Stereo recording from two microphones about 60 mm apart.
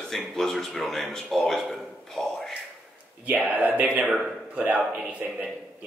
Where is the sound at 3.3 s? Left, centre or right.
Right.